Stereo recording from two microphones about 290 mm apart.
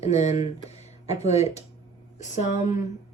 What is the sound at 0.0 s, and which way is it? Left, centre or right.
Speech, left.